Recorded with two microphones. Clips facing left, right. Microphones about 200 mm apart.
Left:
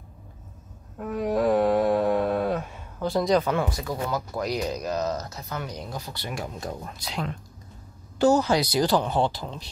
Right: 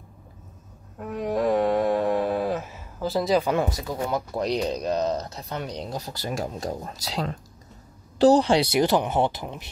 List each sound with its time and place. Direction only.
0.9 s a sound: centre (ahead or behind)
3.5 s speech: 20° right (ahead or behind)
4.4 s speech: 30° right (ahead or behind)